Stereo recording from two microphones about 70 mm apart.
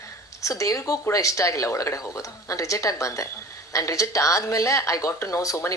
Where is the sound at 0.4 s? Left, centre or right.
Left.